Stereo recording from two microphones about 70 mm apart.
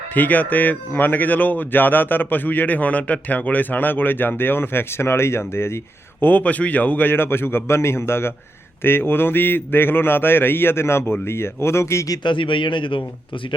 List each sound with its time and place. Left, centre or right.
0.1 s a man's voice: left